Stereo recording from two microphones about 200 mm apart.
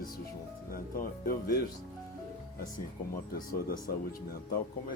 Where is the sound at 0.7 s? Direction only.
45° left (ahead or behind).